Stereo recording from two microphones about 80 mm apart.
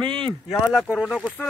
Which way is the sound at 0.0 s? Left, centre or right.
Right.